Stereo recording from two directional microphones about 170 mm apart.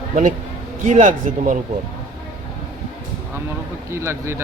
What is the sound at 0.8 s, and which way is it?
Speech, 45° right (ahead or behind).